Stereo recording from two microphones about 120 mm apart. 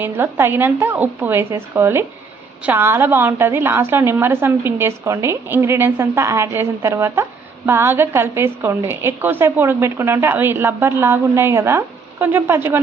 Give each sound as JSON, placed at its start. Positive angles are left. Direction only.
{"t": 0.0, "sound": "a woman's voice", "side_deg": -20}